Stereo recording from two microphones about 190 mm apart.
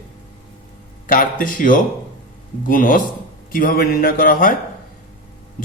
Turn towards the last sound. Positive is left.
turn(degrees=45)  # may be behind; listen again after turning